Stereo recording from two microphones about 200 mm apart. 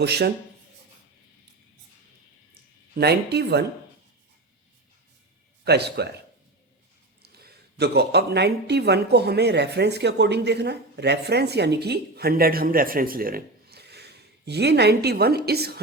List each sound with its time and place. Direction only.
0.0 s speech: 55° right (ahead or behind)
2.9 s speech: 55° right (ahead or behind)
5.6 s speech: 55° right (ahead or behind)
7.2 s speech: 55° right (ahead or behind)